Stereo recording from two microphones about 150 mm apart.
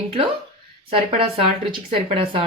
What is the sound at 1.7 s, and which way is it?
Speech, 35° right (ahead or behind).